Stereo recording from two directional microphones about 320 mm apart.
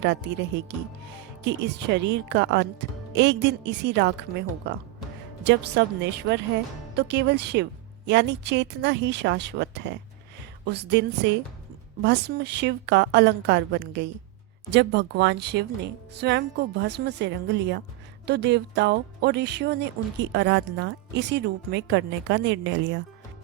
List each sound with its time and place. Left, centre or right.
0.0 s speech: right